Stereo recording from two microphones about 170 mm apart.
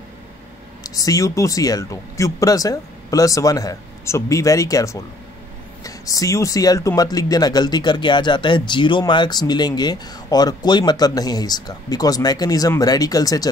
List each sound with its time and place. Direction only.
0.8 s speech: 20° left (ahead or behind)